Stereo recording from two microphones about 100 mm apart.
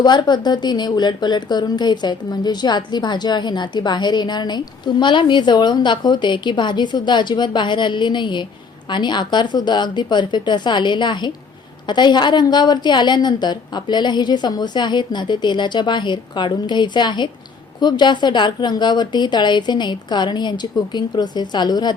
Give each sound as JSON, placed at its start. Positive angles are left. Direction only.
{"t": 0.0, "sound": "a woman's voice", "side_deg": 45}